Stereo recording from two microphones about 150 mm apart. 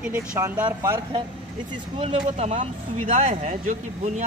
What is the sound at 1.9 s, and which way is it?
Speech, 45° right (ahead or behind).